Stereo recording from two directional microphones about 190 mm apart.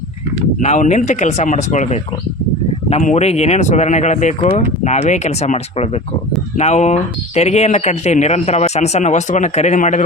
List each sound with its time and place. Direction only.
0.6 s speech: 40° left (ahead or behind)